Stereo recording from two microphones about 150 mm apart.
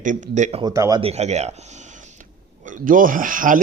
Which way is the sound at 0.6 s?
20° right (ahead or behind).